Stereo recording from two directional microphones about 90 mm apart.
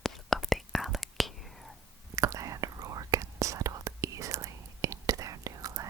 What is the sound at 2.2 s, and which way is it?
Whispering, 40° right (ahead or behind).